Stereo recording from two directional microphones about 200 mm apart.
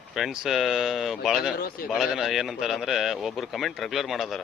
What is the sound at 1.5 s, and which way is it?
Speech, 45° left (ahead or behind).